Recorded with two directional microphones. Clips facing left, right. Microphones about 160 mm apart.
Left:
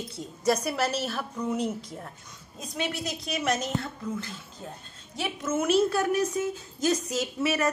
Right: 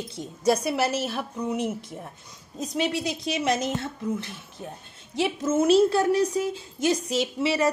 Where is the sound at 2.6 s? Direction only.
30° right (ahead or behind).